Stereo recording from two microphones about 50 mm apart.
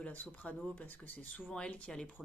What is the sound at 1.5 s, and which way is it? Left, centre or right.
Speech, left.